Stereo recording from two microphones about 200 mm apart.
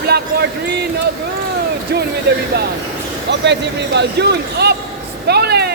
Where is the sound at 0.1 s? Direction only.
55° right (ahead or behind).